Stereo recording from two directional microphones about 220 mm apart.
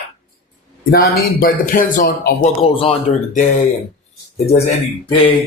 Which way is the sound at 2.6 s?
25° left (ahead or behind).